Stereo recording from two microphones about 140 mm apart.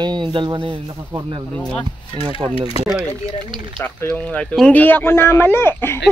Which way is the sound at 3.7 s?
10° left (ahead or behind).